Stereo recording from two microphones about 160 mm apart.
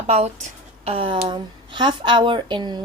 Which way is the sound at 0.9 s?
35° right (ahead or behind).